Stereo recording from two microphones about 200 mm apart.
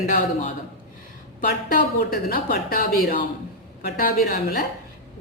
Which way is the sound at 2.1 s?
50° left (ahead or behind).